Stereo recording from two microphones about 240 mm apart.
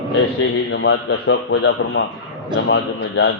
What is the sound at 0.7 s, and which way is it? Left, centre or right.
A man's voice, left.